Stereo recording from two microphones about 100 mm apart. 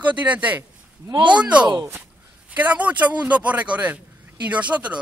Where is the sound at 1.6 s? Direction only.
45° right (ahead or behind).